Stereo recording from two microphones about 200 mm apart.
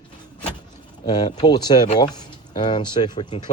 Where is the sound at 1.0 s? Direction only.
20° left (ahead or behind).